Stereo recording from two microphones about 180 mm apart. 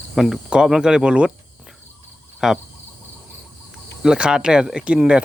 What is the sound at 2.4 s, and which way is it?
Cricket, 5° right (ahead or behind).